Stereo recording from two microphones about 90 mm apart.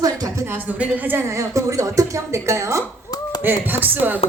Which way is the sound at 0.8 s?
20° right (ahead or behind).